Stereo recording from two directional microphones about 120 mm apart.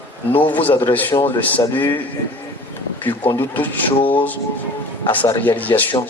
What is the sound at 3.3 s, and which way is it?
Speech, 15° left (ahead or behind).